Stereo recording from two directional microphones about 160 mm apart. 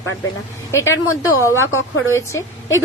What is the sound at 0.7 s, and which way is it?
A woman's voice, 20° left (ahead or behind).